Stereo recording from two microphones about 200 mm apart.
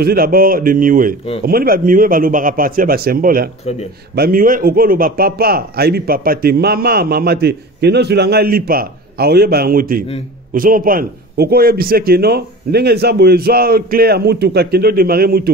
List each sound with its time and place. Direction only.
0.0 s a man's voice: 50° right (ahead or behind)